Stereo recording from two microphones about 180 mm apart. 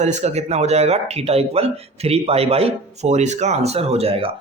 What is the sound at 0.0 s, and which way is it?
Speech, 40° right (ahead or behind).